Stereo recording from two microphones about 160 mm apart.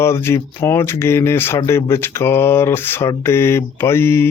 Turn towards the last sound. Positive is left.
turn(degrees=15)  # may be behind; listen again after turning